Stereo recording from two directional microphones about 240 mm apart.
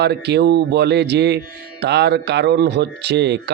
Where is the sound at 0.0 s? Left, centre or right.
Right.